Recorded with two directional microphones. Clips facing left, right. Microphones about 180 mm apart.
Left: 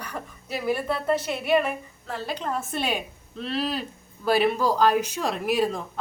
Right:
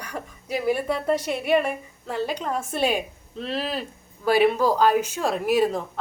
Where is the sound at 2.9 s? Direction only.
Centre (ahead or behind).